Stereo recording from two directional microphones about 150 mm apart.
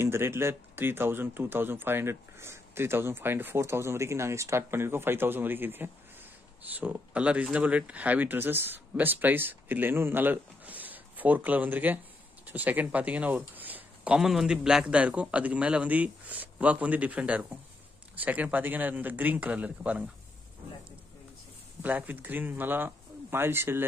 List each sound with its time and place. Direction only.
0.0 s a man's voice: 15° right (ahead or behind)
21.8 s a man's voice: 10° right (ahead or behind)